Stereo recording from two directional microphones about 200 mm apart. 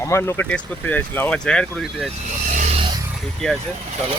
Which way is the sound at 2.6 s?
35° right (ahead or behind).